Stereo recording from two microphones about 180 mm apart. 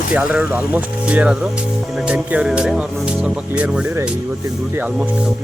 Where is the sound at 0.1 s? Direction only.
5° right (ahead or behind).